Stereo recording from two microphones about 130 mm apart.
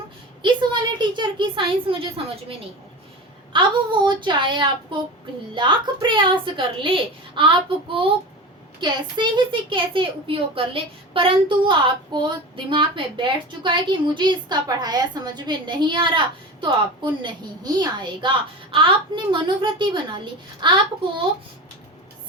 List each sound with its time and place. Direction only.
0.4 s a woman's voice: 35° right (ahead or behind)
3.5 s a woman's voice: 40° right (ahead or behind)
8.8 s a woman's voice: 35° right (ahead or behind)